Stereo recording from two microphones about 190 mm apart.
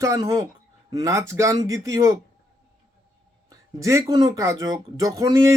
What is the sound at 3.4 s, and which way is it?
Speech, 15° right (ahead or behind).